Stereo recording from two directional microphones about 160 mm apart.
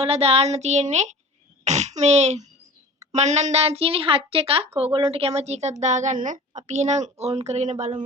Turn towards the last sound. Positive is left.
turn(degrees=-45)  # may be behind; listen again after turning